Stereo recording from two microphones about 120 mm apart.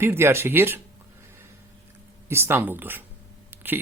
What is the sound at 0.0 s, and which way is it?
Speech, 20° right (ahead or behind).